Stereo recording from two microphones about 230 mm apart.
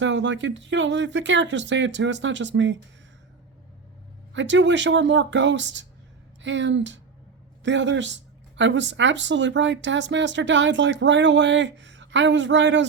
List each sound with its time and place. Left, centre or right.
0.0 s speech: right
4.4 s speech: right